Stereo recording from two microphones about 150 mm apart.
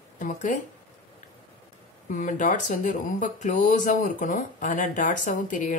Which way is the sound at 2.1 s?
60° left (ahead or behind).